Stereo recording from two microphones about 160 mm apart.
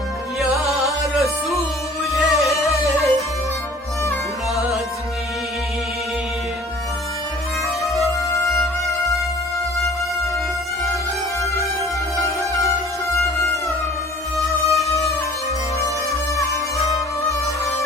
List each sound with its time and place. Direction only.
0.3 s music: centre (ahead or behind)
2.1 s music: centre (ahead or behind)
7.9 s music: centre (ahead or behind)
12.4 s music: 20° left (ahead or behind)
14.3 s music: centre (ahead or behind)